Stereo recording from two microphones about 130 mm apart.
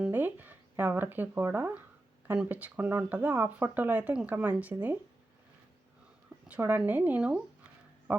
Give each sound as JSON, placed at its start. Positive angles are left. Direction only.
{"t": 0.0, "sound": "speech", "side_deg": -15}
{"t": 6.5, "sound": "speech", "side_deg": -15}